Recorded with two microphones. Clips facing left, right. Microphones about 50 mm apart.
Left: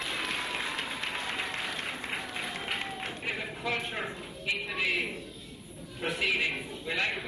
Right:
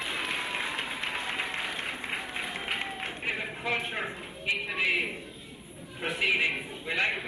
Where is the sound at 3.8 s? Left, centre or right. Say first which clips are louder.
Right 2 dB; centre.